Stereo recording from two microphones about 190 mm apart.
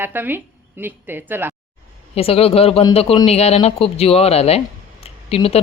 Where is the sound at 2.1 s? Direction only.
30° left (ahead or behind).